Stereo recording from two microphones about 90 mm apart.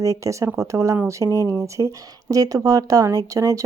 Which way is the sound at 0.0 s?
35° right (ahead or behind).